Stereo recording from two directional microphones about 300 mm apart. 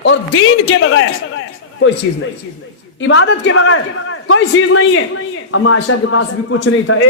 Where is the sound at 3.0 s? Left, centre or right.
Left.